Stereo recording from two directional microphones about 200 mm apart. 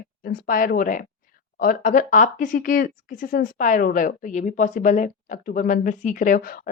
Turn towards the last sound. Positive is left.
turn(degrees=45)  # may be behind; listen again after turning